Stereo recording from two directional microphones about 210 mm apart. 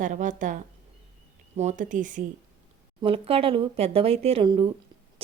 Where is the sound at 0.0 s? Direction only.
35° right (ahead or behind).